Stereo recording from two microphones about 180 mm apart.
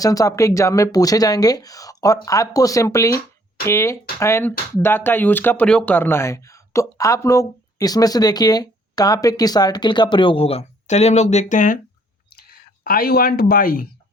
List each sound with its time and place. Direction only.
0.0 s speech: 20° left (ahead or behind); by 11.8 s 45° left (ahead or behind)
12.3 s speech: 55° left (ahead or behind)